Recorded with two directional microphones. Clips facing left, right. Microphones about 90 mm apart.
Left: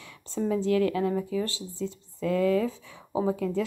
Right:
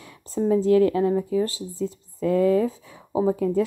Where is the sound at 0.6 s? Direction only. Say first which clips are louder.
Right 6 dB; 30° right (ahead or behind).